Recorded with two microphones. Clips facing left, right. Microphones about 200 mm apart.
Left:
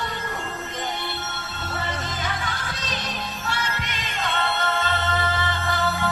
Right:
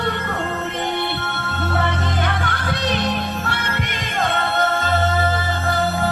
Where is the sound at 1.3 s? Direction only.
60° right (ahead or behind).